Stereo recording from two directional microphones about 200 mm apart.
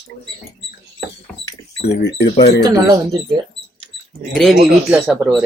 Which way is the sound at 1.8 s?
55° left (ahead or behind).